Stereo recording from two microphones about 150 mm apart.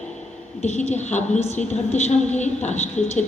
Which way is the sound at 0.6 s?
45° left (ahead or behind).